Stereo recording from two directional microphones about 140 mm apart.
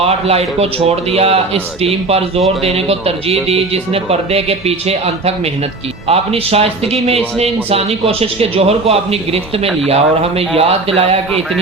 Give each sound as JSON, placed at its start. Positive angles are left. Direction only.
{"t": 0.0, "sound": "a man's voice", "side_deg": -45}